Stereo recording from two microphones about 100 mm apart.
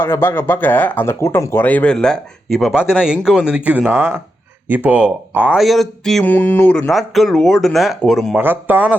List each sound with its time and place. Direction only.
0.0 s speech: 20° left (ahead or behind)
1.6 s speech: 15° left (ahead or behind); by 3.9 s 15° right (ahead or behind)
3.9 s speech: 25° right (ahead or behind)
4.7 s speech: 15° right (ahead or behind)
5.5 s speech: centre (ahead or behind)
6.2 s a sound: 20° left (ahead or behind)
6.9 s speech: centre (ahead or behind)
8.4 s speech: 20° right (ahead or behind)